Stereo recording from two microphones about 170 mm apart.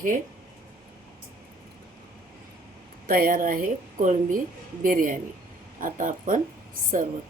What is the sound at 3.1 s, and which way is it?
A woman's voice, 60° right (ahead or behind).